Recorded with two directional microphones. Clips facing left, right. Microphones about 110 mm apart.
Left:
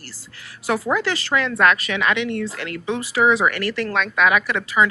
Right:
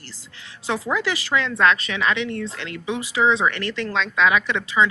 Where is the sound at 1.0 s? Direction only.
15° right (ahead or behind).